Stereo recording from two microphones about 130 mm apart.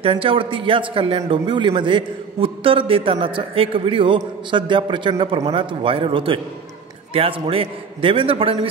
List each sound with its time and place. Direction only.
0.0 s a man's voice: 45° right (ahead or behind)